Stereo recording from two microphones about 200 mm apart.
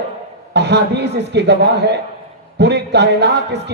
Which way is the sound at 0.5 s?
60° right (ahead or behind).